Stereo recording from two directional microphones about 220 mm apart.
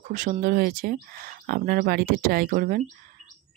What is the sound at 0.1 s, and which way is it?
Speech, 35° right (ahead or behind).